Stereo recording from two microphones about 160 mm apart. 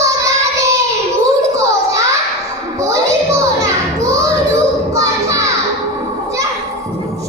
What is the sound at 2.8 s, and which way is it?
Children playing, 20° right (ahead or behind).